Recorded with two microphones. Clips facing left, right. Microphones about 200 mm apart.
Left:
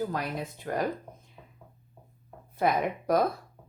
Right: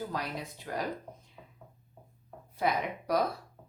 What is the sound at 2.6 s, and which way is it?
Speech, 50° left (ahead or behind).